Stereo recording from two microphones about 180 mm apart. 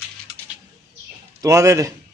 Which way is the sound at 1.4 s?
20° right (ahead or behind).